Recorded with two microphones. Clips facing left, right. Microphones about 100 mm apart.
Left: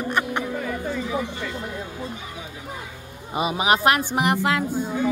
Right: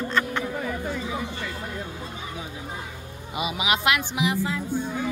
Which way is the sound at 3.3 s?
40° left (ahead or behind).